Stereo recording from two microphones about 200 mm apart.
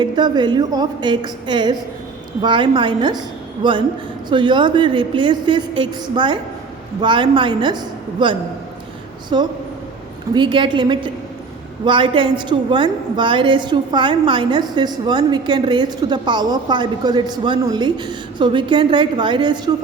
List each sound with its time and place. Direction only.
0.0 s a woman's voice: 20° right (ahead or behind)